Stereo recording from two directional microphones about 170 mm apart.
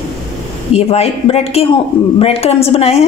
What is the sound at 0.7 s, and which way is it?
A woman's voice, 35° left (ahead or behind).